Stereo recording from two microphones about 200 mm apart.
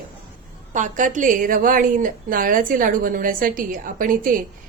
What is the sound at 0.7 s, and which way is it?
A woman's voice, 40° right (ahead or behind).